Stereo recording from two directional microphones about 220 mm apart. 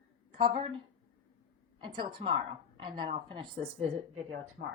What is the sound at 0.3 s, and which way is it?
Speech, 20° right (ahead or behind).